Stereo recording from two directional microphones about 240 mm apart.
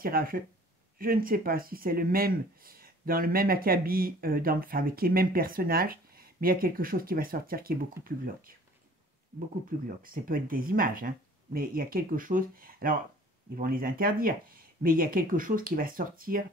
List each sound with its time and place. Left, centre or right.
0.0 s speech: right
9.7 s speech: right